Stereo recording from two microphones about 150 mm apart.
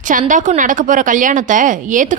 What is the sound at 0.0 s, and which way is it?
A woman's voice, 60° right (ahead or behind).